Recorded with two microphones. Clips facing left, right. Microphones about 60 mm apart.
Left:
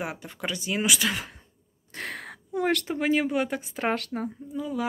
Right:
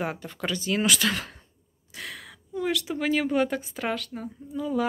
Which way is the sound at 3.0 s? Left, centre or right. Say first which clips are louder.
Right 3 dB; left.